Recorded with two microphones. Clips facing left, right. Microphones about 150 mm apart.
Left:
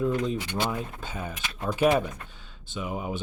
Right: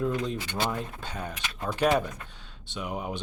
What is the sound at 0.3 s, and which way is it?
Speech, 20° left (ahead or behind).